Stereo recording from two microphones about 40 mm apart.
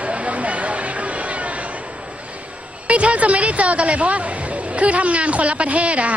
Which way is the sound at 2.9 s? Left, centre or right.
Right.